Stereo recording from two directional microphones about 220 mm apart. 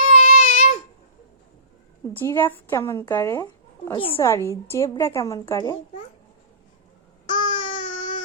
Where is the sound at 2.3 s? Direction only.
10° left (ahead or behind).